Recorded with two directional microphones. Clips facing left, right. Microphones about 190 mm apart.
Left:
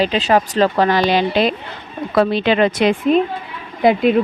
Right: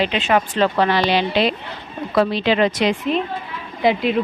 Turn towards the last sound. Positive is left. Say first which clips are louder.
# left 4 dB
turn(degrees=50)  # may be behind; listen again after turning